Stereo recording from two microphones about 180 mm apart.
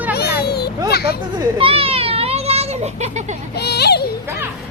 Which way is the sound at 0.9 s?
60° left (ahead or behind).